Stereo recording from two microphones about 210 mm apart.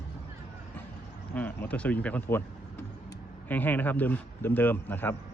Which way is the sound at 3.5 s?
10° left (ahead or behind).